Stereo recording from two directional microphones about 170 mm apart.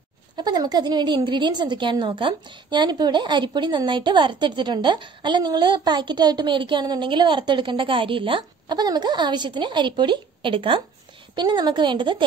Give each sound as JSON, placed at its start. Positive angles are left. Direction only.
{"t": 0.4, "sound": "a woman's voice", "side_deg": -25}